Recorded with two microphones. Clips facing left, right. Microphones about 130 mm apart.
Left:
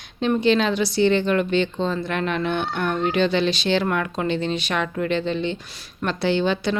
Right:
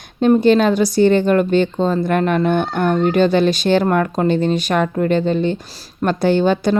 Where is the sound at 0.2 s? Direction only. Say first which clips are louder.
Right 7 dB; 45° right (ahead or behind).